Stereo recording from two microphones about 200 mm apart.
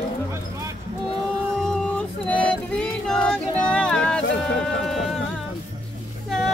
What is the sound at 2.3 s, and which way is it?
Music, 5° left (ahead or behind).